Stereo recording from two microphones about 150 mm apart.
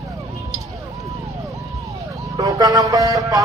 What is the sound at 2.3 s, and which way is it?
Vehicle, 25° right (ahead or behind).